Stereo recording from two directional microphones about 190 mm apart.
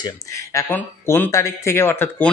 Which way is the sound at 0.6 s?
10° left (ahead or behind).